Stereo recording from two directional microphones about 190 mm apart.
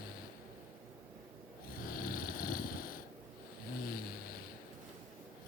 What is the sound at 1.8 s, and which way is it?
Vehicle, 50° left (ahead or behind).